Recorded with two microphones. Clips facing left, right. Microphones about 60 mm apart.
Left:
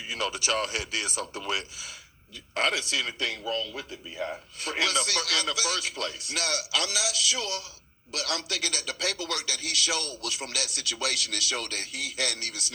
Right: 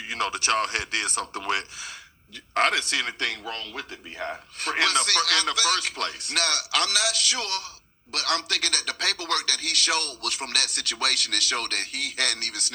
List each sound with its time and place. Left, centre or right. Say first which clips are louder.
0.1 s a man's voice: right 4 dB; right